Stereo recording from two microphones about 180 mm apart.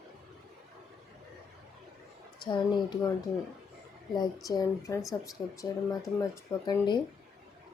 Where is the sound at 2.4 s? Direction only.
25° left (ahead or behind).